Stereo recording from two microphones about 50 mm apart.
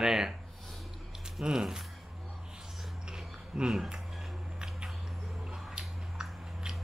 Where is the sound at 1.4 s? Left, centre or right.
Centre.